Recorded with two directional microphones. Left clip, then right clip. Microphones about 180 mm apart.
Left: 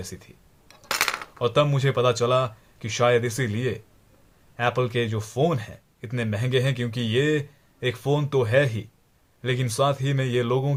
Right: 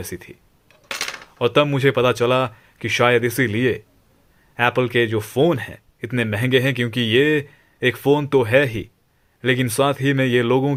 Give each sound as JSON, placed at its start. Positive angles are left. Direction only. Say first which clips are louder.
{"t": 0.0, "sound": "speech", "louder": "right 7 dB", "side_deg": -35}
{"t": 1.4, "sound": "speech", "louder": "right 6 dB", "side_deg": -35}